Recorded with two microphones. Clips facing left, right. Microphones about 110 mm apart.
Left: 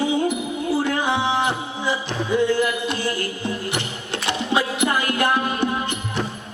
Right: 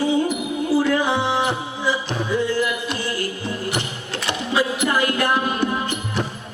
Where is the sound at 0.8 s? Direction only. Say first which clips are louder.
Right 2 dB; 20° left (ahead or behind).